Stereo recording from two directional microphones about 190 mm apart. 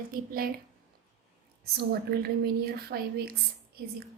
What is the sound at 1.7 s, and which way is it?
A woman's voice, 55° right (ahead or behind).